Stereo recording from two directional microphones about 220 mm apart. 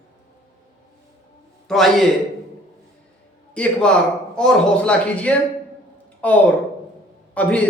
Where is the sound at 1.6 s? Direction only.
Centre (ahead or behind).